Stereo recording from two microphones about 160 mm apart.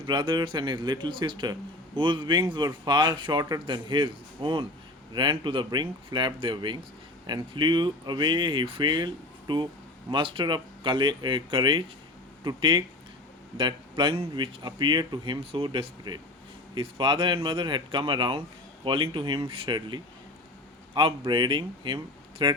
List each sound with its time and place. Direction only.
0.0 s speech: 30° right (ahead or behind)